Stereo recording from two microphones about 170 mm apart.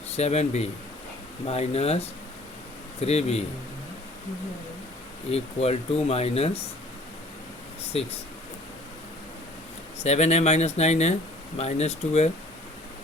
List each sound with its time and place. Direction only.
0.1 s speech: 40° left (ahead or behind)
5.3 s speech: 35° left (ahead or behind)
10.0 s speech: 40° left (ahead or behind)